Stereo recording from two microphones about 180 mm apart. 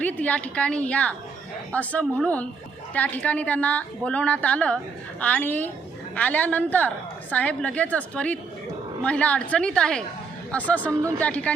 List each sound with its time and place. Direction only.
0.0 s a woman's voice: 10° left (ahead or behind)